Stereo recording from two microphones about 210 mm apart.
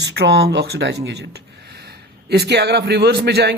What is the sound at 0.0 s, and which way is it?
A man's voice, 55° right (ahead or behind).